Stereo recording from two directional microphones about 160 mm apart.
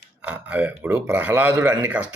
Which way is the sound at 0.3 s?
10° right (ahead or behind).